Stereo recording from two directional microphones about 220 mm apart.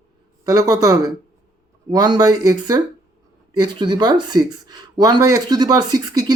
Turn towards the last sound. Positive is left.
turn(degrees=-15)  # may be behind; listen again after turning